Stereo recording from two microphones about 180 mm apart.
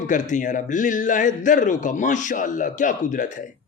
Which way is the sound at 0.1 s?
45° left (ahead or behind).